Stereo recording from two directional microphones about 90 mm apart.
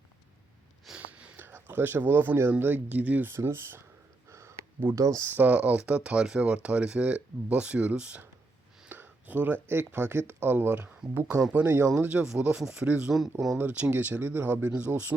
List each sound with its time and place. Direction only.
0.9 s speech: 15° right (ahead or behind)
4.3 s a sound: 30° right (ahead or behind)
4.9 s speech: 35° right (ahead or behind)
5.3 s speech: 20° right (ahead or behind)
11.9 s speech: 10° right (ahead or behind)
13.6 s speech: 15° right (ahead or behind)